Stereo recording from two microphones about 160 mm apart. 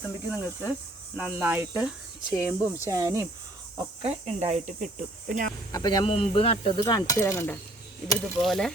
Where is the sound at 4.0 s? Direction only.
40° right (ahead or behind); by 5.5 s 55° right (ahead or behind).